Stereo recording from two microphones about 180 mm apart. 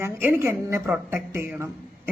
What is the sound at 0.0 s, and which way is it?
A woman's voice, 10° right (ahead or behind).